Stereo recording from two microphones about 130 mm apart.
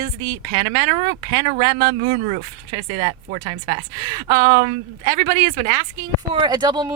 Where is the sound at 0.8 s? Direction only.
85° right.